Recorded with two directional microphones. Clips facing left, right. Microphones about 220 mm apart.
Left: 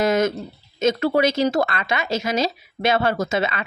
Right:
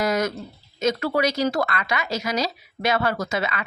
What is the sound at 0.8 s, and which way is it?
Speech, 25° left (ahead or behind).